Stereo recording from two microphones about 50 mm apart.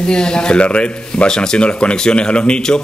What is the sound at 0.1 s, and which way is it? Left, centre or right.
Speech, centre.